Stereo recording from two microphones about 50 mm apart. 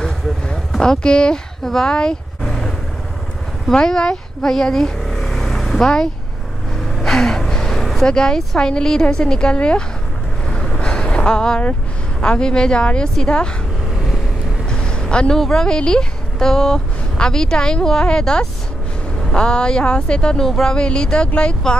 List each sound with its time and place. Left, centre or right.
0.0 s a sound: centre
3.7 s vehicle: centre
5.7 s speech: centre
10.5 s vehicle: centre
10.8 s a sound: centre
12.2 s speech: centre
14.7 s a sound: centre
15.3 s speech: centre
20.4 s speech: centre
20.7 s speech: centre